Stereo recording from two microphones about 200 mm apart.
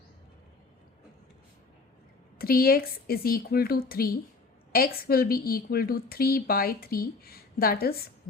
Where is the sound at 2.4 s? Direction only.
50° left (ahead or behind).